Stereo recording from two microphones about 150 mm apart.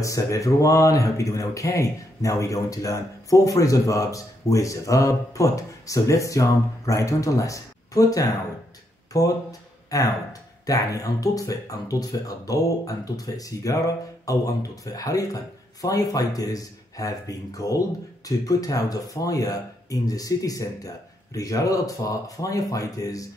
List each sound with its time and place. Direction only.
0.0 s a man's voice: 20° left (ahead or behind)